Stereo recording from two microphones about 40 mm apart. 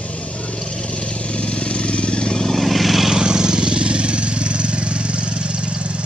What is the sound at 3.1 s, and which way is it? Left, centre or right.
Vehicle, centre.